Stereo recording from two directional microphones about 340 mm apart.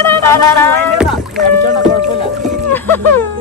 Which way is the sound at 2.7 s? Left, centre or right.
Centre.